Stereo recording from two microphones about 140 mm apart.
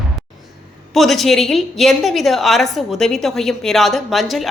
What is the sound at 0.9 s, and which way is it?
A woman's voice, centre (ahead or behind).